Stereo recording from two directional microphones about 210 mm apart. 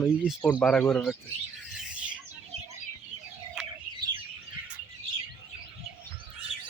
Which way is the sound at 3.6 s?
5° right (ahead or behind).